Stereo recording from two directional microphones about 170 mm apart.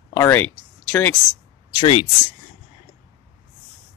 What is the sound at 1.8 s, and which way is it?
Speech, 30° left (ahead or behind).